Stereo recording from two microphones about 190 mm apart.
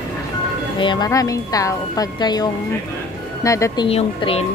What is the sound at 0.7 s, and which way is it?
A woman's voice, 25° left (ahead or behind).